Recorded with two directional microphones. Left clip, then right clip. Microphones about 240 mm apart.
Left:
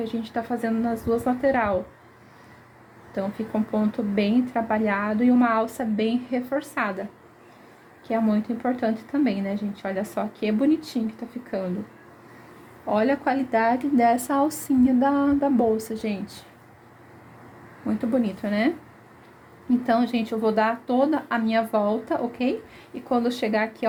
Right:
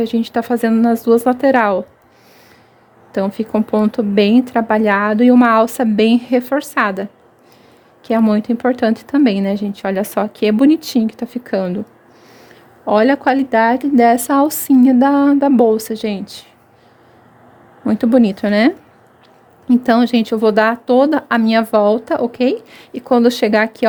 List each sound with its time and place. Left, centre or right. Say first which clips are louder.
0.0 s speech: right 11 dB; right
3.1 s speech: right 10 dB; right
12.8 s speech: right 10 dB; right
17.8 s speech: right 12 dB; right